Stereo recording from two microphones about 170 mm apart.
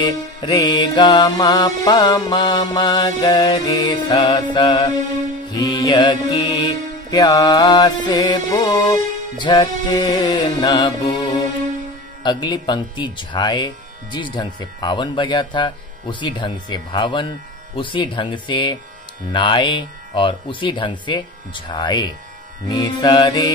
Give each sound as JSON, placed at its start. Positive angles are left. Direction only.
{"t": 0.0, "sound": "music", "side_deg": 25}